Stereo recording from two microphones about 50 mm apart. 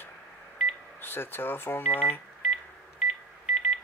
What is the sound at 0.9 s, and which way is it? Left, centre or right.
Speech, left.